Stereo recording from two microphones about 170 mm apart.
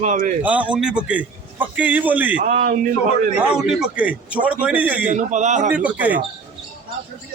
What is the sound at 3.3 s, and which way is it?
A man's voice, 5° right (ahead or behind).